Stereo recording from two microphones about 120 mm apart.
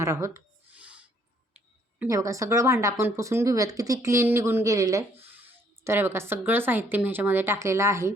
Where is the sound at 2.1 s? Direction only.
30° right (ahead or behind).